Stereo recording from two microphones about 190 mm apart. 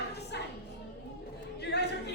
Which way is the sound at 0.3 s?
65° left (ahead or behind).